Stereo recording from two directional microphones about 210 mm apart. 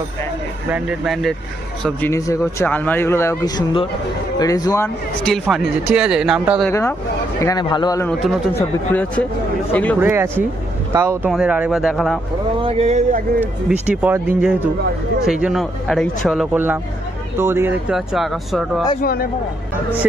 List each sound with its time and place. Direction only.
0.7 s speech: 5° right (ahead or behind)
6.7 s speech: 15° left (ahead or behind)
8.1 s speech: centre (ahead or behind)
9.9 s speech: 10° right (ahead or behind)
12.6 s speech: 30° right (ahead or behind)
13.7 s speech: 5° right (ahead or behind)
18.9 s speech: 45° left (ahead or behind)